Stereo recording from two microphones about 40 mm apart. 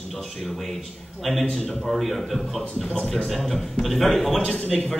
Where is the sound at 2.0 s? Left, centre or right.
Centre.